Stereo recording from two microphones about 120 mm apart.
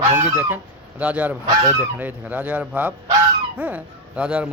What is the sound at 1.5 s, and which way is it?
Goose, 30° right (ahead or behind).